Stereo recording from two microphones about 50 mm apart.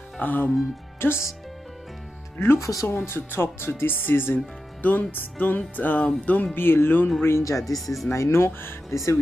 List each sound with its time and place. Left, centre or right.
0.2 s music: left
0.9 s speech: left
2.3 s speech: left
2.6 s speech: left
3.1 s speech: left
4.8 s music: left
6.5 s speech: left
7.2 s speech: left
7.7 s speech: centre
8.1 s speech: left
8.9 s speech: left